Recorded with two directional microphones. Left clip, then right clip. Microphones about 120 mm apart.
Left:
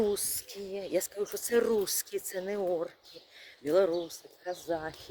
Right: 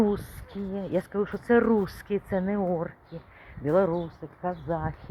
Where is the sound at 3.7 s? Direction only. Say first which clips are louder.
Right 3 dB; 30° left (ahead or behind).